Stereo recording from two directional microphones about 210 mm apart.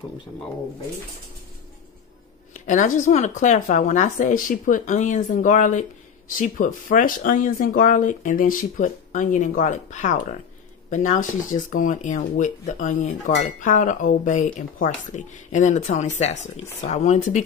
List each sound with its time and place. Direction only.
2.5 s speech: 35° left (ahead or behind)